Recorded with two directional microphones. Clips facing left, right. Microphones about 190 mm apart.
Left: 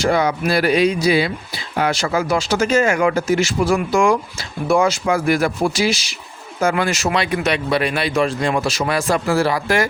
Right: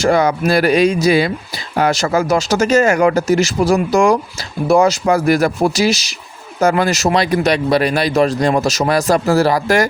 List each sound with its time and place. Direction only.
0.0 s speech: 45° right (ahead or behind)